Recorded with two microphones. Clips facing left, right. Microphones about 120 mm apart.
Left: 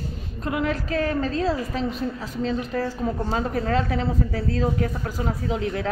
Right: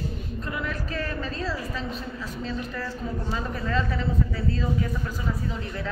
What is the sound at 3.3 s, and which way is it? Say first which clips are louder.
Speech: left 5 dB; 65° left (ahead or behind).